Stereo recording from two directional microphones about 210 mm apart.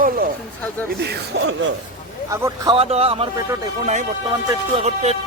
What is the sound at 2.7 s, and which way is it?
Speech, 30° right (ahead or behind).